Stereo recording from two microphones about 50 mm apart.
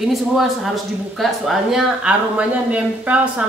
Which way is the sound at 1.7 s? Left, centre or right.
Right.